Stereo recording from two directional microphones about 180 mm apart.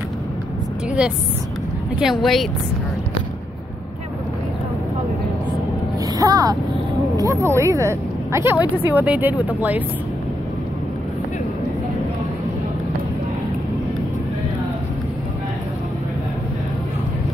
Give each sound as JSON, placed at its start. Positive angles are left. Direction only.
{"t": 2.0, "sound": "speech", "side_deg": 0}
{"t": 6.1, "sound": "speech", "side_deg": -20}